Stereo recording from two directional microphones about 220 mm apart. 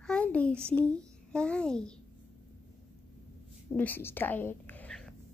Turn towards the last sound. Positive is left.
turn(degrees=5)  # may be behind; listen again after turning